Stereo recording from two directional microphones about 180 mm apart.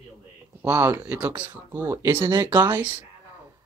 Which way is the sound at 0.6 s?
15° right (ahead or behind).